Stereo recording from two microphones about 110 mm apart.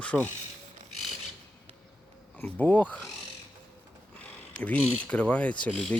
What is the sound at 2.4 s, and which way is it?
Speech, 15° left (ahead or behind).